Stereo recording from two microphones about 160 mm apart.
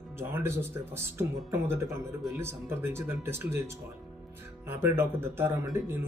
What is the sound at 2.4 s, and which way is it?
Speech, 15° right (ahead or behind).